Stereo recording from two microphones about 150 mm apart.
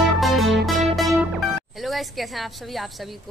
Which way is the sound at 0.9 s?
Centre (ahead or behind).